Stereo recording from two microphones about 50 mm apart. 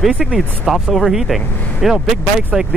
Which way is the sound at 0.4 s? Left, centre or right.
Centre.